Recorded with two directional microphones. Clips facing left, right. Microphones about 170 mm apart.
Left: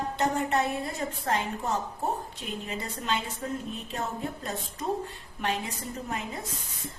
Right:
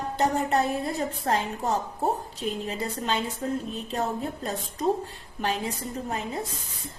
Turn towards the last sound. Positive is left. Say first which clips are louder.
# right 2 dB
turn(degrees=-35)  # may be behind; listen again after turning